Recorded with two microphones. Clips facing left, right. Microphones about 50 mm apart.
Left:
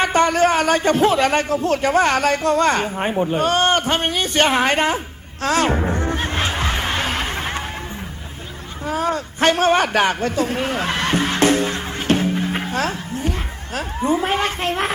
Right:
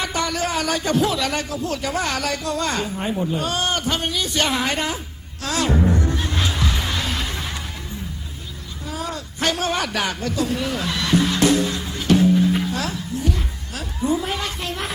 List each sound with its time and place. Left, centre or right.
0.0 s a man's voice: left
5.4 s music: left
8.9 s a sound: left